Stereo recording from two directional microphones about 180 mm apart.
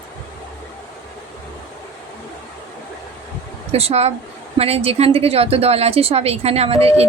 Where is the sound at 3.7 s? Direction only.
35° right (ahead or behind).